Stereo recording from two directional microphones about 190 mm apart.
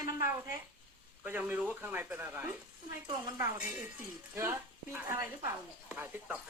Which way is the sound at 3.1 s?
25° right (ahead or behind).